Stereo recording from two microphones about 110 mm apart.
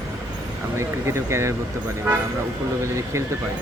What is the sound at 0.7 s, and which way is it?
Speech, 25° right (ahead or behind).